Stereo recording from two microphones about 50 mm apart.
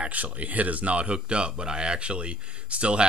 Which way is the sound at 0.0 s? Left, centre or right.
Right.